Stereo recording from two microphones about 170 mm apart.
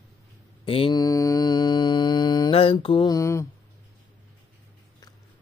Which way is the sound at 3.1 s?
15° left (ahead or behind).